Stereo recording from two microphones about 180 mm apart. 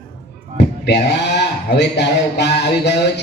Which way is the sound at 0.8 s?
70° left (ahead or behind).